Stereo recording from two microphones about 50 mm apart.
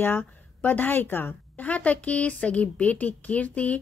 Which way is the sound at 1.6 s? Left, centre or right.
Left.